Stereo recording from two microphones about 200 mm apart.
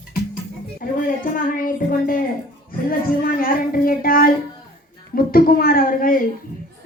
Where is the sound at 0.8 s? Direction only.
45° left (ahead or behind).